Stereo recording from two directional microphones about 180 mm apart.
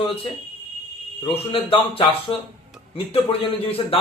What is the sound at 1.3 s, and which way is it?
A man's voice, 30° left (ahead or behind).